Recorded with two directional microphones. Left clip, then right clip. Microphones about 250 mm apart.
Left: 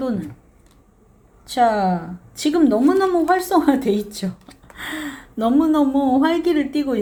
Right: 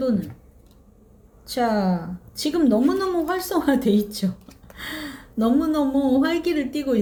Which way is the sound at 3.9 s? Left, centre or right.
Left.